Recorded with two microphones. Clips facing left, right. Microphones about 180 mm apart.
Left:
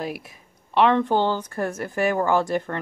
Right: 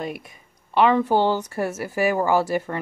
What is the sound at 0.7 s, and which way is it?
Speech, 5° right (ahead or behind).